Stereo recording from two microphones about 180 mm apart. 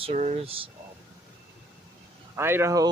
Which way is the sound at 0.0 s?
35° right (ahead or behind).